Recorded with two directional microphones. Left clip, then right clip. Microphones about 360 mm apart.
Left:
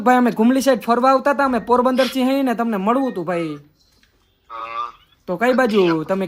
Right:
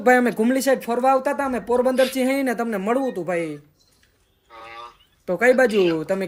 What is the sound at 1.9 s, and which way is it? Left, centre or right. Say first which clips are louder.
Speech: left 2 dB; centre.